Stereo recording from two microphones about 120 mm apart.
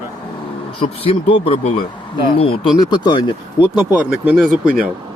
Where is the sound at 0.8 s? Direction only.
55° left (ahead or behind).